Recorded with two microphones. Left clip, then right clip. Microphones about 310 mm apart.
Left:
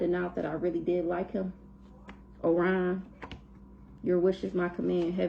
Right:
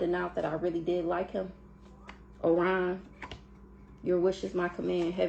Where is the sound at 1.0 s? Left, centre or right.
Right.